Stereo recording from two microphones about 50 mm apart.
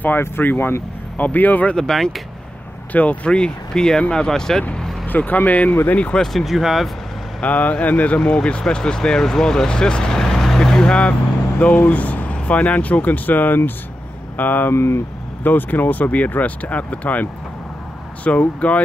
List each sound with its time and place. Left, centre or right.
0.2 s speech: left
1.8 s speech: centre
2.9 s speech: left; by 4.6 s centre
5.0 s speech: left
6.1 s speech: centre
6.4 s speech: centre
7.3 s speech: left
8.2 s speech: centre
11.6 s speech: left
14.7 s speech: left
15.4 s speech: left